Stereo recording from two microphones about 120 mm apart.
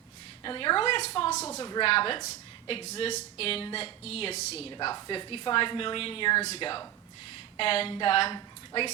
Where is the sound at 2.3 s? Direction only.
50° left (ahead or behind).